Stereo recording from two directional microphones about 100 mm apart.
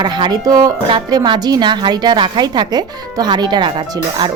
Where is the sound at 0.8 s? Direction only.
50° right (ahead or behind).